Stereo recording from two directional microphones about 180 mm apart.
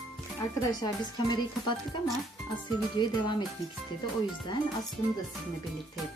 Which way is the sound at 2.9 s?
25° left (ahead or behind).